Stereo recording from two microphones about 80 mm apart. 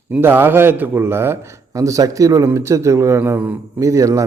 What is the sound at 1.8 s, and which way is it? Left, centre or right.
A man's voice, right.